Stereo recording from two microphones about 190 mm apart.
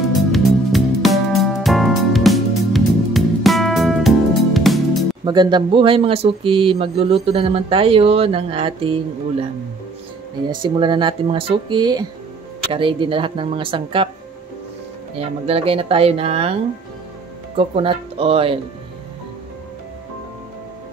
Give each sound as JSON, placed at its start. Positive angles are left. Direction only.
{"t": 0.1, "sound": "music", "side_deg": 0}
{"t": 5.2, "sound": "speech", "side_deg": -25}
{"t": 10.5, "sound": "speech", "side_deg": -25}
{"t": 15.1, "sound": "speech", "side_deg": -30}
{"t": 17.6, "sound": "speech", "side_deg": -30}